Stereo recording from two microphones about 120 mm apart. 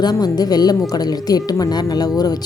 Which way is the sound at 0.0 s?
35° left (ahead or behind).